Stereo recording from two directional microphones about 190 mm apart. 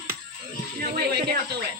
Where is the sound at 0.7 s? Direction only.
55° right (ahead or behind).